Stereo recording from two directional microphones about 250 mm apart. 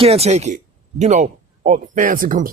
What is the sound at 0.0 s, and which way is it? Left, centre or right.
Speech, right.